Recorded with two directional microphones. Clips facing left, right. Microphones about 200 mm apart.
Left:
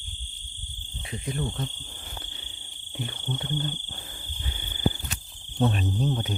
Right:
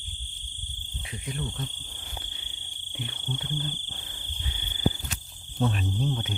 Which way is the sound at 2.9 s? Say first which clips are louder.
Left 4 dB; 45° left (ahead or behind).